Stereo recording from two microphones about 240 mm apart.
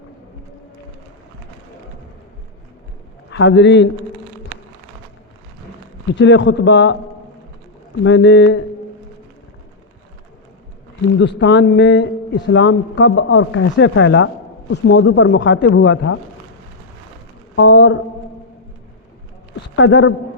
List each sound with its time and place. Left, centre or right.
3.3 s speech: left
6.1 s speech: left
8.0 s speech: left
11.3 s speech: left
17.5 s a sound: left
19.7 s a man's voice: left